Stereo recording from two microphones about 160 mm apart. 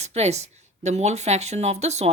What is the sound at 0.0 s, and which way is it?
Speech, 45° right (ahead or behind).